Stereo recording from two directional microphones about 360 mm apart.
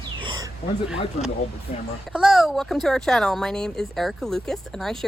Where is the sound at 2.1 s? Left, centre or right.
Centre.